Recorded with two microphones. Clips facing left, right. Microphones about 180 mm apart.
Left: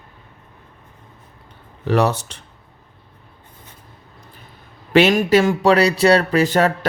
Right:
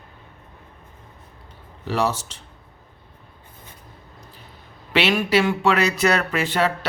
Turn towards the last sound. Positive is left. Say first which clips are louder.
# left 6 dB
turn(degrees=45)  # may be behind; listen again after turning